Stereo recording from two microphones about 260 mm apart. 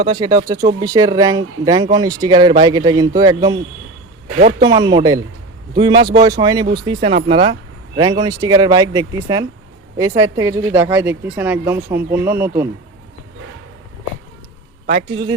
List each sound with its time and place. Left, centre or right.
0.0 s speech: centre
4.4 s a man's voice: right
4.7 s a man's voice: centre
14.8 s a man's voice: right